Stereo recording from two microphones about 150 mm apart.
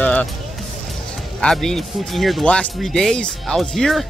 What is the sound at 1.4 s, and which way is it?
Speech, 5° left (ahead or behind).